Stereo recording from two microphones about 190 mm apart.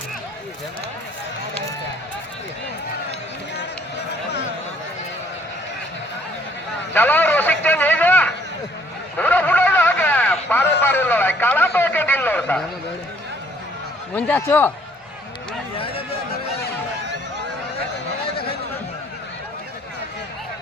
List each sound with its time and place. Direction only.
6.9 s a sound: 10° left (ahead or behind)
14.1 s a man's voice: 10° left (ahead or behind)
15.8 s chatter: 30° left (ahead or behind)